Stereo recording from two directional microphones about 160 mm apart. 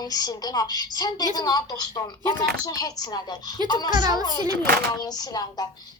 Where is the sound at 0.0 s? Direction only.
25° left (ahead or behind).